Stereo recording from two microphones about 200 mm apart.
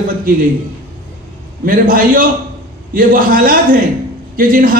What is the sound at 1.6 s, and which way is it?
A man's voice, 45° right (ahead or behind).